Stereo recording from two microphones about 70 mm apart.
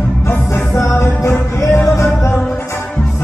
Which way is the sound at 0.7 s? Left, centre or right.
Left.